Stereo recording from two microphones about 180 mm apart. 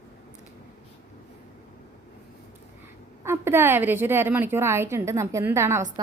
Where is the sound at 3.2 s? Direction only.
15° right (ahead or behind).